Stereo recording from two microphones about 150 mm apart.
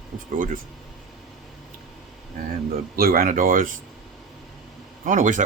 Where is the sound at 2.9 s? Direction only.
75° right (ahead or behind).